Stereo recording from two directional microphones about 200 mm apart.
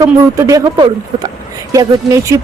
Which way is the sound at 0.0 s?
15° right (ahead or behind).